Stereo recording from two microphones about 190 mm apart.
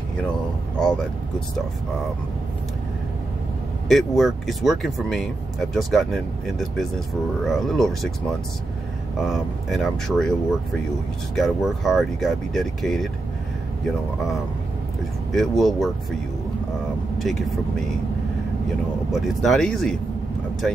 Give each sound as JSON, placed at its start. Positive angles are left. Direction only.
{"t": 3.9, "sound": "speech", "side_deg": 0}
{"t": 9.2, "sound": "speech", "side_deg": 0}
{"t": 17.2, "sound": "speech", "side_deg": 0}
{"t": 19.1, "sound": "speech", "side_deg": 0}